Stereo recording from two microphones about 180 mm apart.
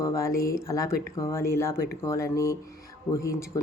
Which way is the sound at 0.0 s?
15° left (ahead or behind).